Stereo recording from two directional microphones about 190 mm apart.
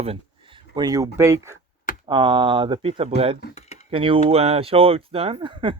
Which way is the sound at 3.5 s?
35° left (ahead or behind).